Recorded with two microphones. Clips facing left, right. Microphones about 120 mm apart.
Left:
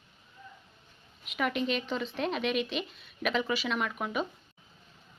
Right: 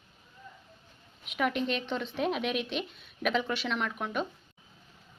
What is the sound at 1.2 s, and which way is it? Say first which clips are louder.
Speech: right 1 dB; centre (ahead or behind).